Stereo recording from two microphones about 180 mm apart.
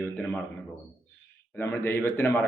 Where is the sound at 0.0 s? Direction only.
5° left (ahead or behind).